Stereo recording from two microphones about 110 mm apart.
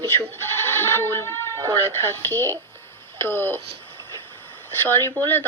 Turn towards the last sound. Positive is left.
turn(degrees=20)  # may be behind; listen again after turning